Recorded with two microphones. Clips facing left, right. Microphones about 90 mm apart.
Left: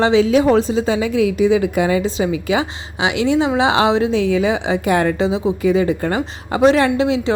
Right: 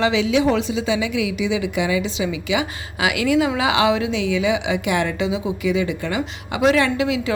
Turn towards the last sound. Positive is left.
turn(degrees=30)  # may be behind; listen again after turning